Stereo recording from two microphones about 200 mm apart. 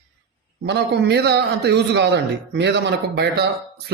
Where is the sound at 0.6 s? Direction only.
60° right (ahead or behind).